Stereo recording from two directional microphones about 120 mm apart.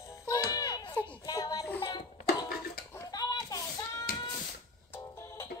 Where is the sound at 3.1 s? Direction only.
30° left (ahead or behind).